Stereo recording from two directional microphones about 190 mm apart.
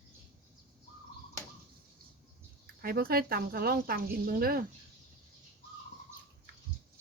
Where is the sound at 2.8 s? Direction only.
55° right (ahead or behind).